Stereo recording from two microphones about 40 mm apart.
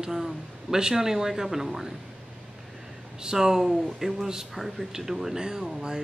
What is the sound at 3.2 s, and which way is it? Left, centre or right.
Speech, centre.